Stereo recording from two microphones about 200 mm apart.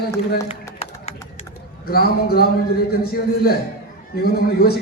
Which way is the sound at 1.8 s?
50° left (ahead or behind).